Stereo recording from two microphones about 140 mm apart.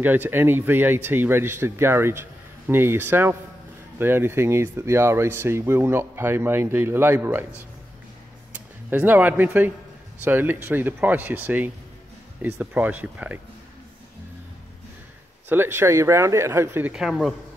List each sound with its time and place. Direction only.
0.0 s speech: 15° right (ahead or behind)
8.9 s speech: 10° right (ahead or behind)
15.4 s speech: 15° right (ahead or behind)
16.9 s speech: centre (ahead or behind)